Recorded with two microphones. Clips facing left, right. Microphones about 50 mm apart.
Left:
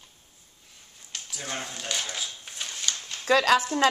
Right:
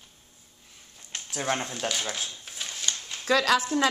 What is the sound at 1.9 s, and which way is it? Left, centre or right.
Speech, centre.